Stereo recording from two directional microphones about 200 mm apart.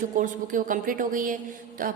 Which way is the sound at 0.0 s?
40° right (ahead or behind).